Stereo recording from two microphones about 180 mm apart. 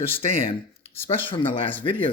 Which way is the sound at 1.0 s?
30° left (ahead or behind).